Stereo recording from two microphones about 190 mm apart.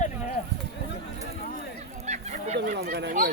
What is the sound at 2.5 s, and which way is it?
Speech, 50° right (ahead or behind).